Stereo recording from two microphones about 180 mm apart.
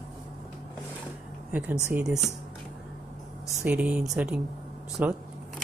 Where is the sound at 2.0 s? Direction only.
Centre (ahead or behind).